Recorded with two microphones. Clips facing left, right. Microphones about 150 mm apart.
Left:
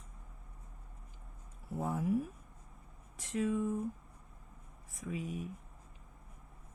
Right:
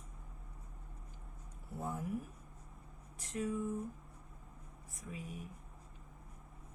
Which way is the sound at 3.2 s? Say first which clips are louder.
Left 5 dB; 90° left.